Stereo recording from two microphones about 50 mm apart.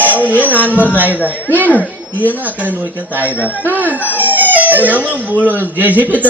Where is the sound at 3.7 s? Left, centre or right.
Right.